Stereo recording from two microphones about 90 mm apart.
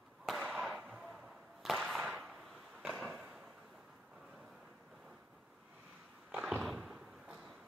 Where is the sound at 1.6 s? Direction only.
Centre (ahead or behind).